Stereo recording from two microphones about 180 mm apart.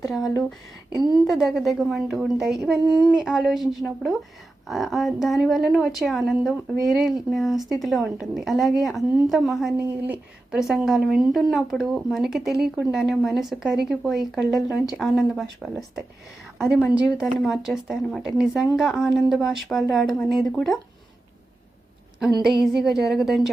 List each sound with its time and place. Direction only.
1.1 s a woman's voice: centre (ahead or behind)
22.6 s a woman's voice: centre (ahead or behind)